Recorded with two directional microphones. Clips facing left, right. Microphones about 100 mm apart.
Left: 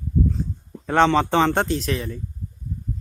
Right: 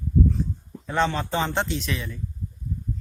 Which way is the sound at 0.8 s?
70° left (ahead or behind).